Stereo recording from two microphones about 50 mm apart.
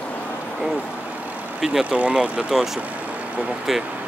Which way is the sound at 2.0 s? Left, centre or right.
Right.